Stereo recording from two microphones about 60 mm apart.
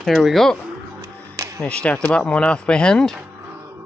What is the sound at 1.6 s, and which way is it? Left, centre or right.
Speech, centre.